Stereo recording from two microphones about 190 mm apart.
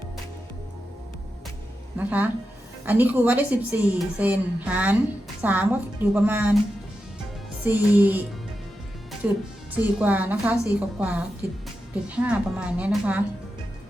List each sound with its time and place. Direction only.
2.0 s a woman's voice: 10° right (ahead or behind)
7.6 s a woman's voice: 10° right (ahead or behind)
9.2 s a woman's voice: 5° right (ahead or behind)